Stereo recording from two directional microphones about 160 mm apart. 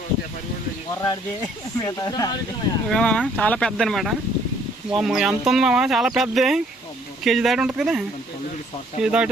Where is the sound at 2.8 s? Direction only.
5° left (ahead or behind).